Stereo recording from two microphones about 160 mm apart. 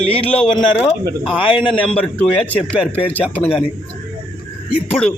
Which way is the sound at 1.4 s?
30° left (ahead or behind).